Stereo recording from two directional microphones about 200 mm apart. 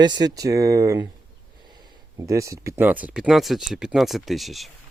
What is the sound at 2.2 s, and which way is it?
Speech, 15° right (ahead or behind).